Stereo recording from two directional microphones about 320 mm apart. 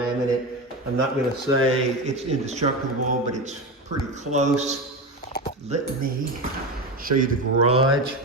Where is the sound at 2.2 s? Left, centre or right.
Right.